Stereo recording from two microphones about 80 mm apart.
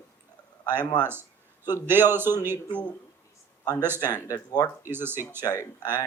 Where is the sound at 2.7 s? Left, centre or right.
Centre.